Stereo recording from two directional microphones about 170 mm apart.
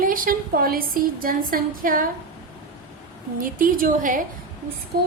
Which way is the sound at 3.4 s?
55° right (ahead or behind).